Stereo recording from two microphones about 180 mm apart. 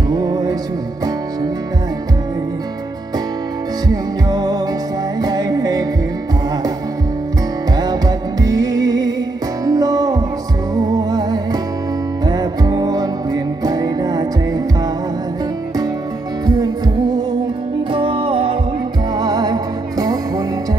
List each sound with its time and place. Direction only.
0.1 s music: 20° right (ahead or behind)
3.9 s music: 20° right (ahead or behind)
7.7 s music: 20° right (ahead or behind)
16.4 s music: 20° right (ahead or behind)
17.9 s music: 30° right (ahead or behind)